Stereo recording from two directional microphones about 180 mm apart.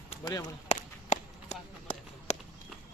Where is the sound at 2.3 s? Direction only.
40° left (ahead or behind).